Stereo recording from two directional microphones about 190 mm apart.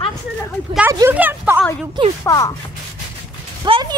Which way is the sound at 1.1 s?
10° right (ahead or behind).